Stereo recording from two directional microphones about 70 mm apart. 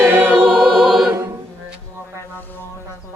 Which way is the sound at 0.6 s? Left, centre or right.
Centre.